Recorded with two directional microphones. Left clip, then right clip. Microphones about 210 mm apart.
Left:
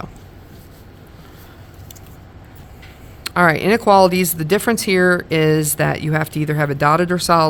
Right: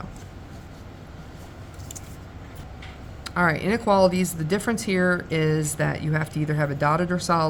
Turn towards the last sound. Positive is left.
turn(degrees=55)  # may be behind; listen again after turning